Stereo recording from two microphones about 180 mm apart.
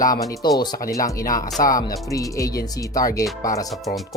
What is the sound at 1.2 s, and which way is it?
Speech, 50° left (ahead or behind).